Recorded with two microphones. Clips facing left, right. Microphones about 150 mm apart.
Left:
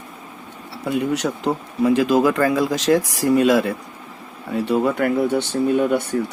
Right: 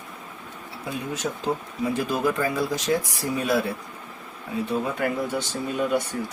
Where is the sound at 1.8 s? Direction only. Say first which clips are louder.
Left 10 dB; 90° left.